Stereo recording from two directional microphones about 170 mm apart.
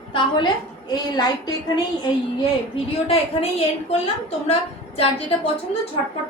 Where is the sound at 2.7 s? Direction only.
35° left (ahead or behind).